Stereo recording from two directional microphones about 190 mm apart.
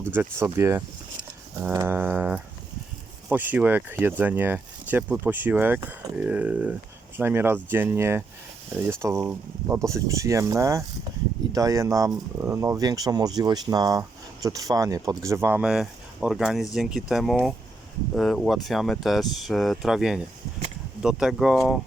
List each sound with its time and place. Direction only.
0.3 s speech: 10° right (ahead or behind)